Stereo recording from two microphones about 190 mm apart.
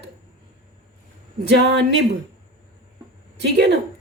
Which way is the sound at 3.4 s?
60° right (ahead or behind).